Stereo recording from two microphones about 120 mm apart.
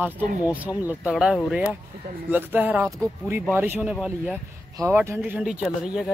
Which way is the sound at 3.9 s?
5° right (ahead or behind).